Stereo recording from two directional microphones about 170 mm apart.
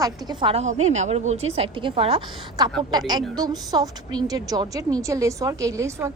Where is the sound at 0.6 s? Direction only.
40° right (ahead or behind).